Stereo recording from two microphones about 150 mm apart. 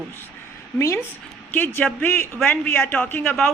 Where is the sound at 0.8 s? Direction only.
20° left (ahead or behind).